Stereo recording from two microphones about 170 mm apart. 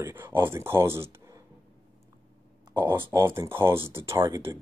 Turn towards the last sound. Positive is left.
turn(degrees=-20)  # may be behind; listen again after turning